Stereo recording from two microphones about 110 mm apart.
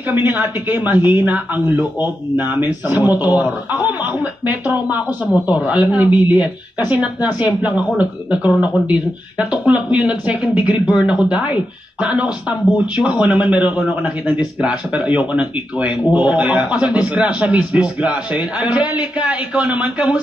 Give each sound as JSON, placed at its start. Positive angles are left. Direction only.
{"t": 0.1, "sound": "a man's voice", "side_deg": -15}